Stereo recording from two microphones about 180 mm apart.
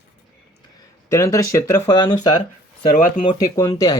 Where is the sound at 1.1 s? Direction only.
15° left (ahead or behind).